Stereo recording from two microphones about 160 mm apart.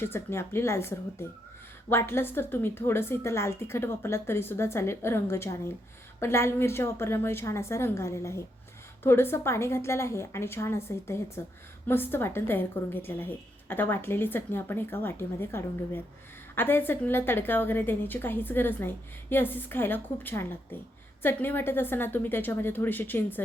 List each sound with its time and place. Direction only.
0.0 s a woman's voice: 15° left (ahead or behind)